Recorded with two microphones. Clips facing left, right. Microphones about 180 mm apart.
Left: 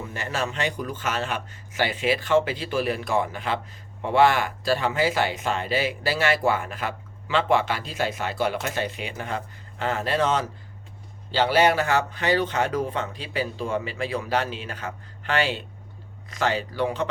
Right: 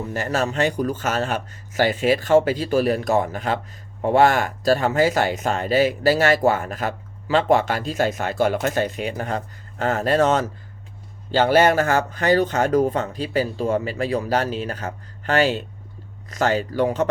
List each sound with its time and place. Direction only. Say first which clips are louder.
0.1 s speech: right 6 dB; 40° right (ahead or behind)